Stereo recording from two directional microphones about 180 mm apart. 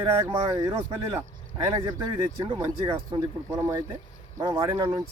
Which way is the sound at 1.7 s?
25° right (ahead or behind).